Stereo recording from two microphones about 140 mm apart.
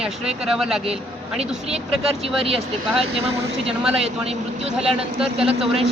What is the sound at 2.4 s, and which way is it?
Speech, 45° right (ahead or behind).